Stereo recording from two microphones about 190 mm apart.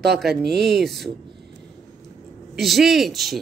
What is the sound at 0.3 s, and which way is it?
Speech, 60° right (ahead or behind).